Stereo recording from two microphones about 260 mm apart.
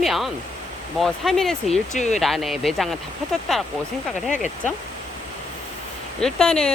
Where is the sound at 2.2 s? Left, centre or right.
Centre.